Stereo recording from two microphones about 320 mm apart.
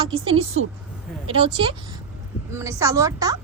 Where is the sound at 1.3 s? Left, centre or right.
Centre.